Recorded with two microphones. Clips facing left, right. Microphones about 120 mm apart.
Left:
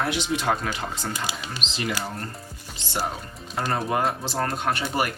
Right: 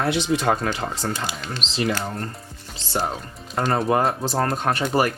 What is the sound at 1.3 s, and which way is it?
Speech, 5° left (ahead or behind).